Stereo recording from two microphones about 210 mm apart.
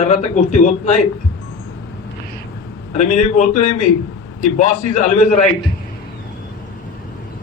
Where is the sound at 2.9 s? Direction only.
35° left (ahead or behind).